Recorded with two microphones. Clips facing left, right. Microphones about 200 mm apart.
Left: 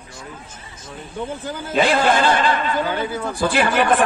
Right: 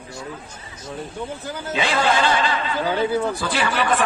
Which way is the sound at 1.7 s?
55° left (ahead or behind).